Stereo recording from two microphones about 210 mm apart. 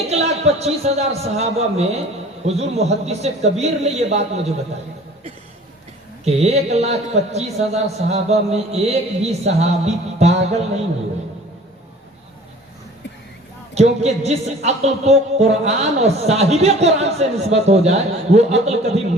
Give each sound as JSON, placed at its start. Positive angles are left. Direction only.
{"t": 0.1, "sound": "speech", "side_deg": -30}
{"t": 6.2, "sound": "speech", "side_deg": -30}
{"t": 13.7, "sound": "speech", "side_deg": -30}